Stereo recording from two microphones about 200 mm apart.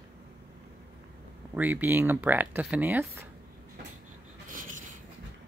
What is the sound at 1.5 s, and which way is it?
Speech, 10° right (ahead or behind).